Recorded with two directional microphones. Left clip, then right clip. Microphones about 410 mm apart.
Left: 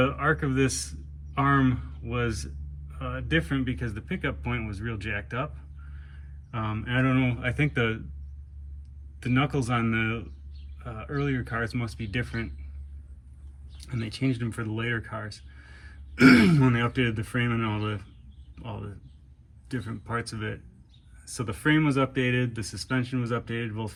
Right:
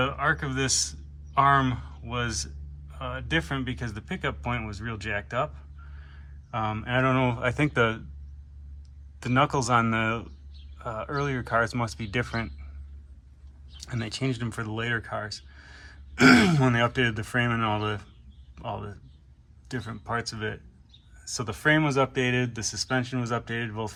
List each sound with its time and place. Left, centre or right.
0.0 s speech: centre
6.5 s speech: centre
9.2 s speech: centre
13.7 s speech: centre
20.3 s speech: right
21.5 s speech: centre